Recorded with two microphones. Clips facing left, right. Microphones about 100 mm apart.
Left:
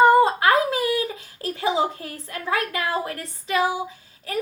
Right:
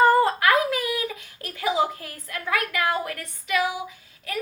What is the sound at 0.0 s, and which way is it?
A woman's voice, 20° left (ahead or behind).